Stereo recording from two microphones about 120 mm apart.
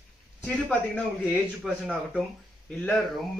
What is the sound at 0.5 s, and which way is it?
A man's voice, 10° left (ahead or behind).